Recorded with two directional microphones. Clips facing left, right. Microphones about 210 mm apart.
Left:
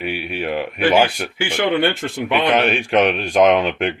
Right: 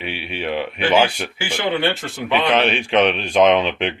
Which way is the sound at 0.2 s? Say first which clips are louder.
Left 3 dB; 50° left (ahead or behind).